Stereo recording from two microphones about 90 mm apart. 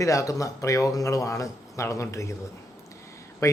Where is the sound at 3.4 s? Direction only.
40° left (ahead or behind).